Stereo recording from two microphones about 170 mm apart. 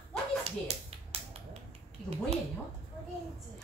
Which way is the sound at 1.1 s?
35° right (ahead or behind).